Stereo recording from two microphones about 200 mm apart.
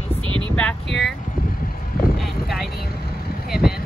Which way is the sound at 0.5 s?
5° left (ahead or behind).